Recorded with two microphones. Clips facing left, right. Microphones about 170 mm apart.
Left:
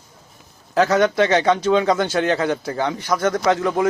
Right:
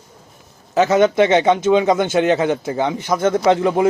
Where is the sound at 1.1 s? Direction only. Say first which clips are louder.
Right 3 dB; 25° right (ahead or behind).